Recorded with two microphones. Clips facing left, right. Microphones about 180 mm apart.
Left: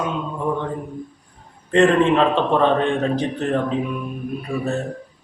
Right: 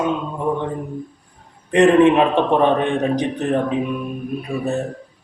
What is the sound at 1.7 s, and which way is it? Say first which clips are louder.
A man's voice: right 3 dB; 15° right (ahead or behind).